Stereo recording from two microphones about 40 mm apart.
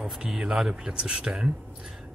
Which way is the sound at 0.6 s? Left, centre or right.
Centre.